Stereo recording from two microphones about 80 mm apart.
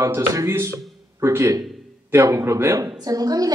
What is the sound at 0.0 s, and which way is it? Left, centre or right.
A man's voice, right.